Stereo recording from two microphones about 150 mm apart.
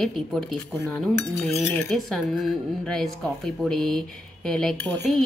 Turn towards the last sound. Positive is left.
turn(degrees=10)  # may be behind; listen again after turning